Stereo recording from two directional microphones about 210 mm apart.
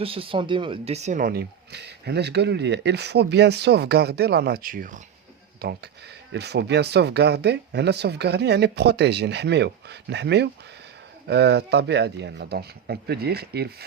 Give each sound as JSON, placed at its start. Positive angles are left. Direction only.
{"t": 0.0, "sound": "speech", "side_deg": -25}
{"t": 5.5, "sound": "speech", "side_deg": -50}